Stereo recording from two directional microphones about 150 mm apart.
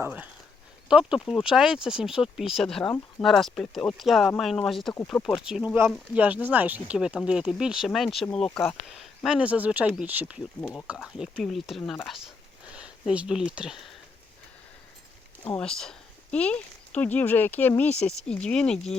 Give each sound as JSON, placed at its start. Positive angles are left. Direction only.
{"t": 0.0, "sound": "speech", "side_deg": -10}
{"t": 8.4, "sound": "speech", "side_deg": 15}
{"t": 8.9, "sound": "speech", "side_deg": 0}
{"t": 10.6, "sound": "speech", "side_deg": 5}
{"t": 15.5, "sound": "speech", "side_deg": 5}